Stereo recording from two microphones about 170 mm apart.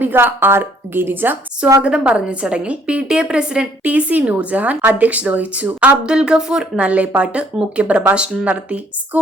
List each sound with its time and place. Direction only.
0.0 s speech: 10° right (ahead or behind)